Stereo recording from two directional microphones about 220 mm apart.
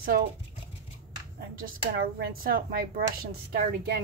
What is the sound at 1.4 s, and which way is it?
Speech, 45° right (ahead or behind).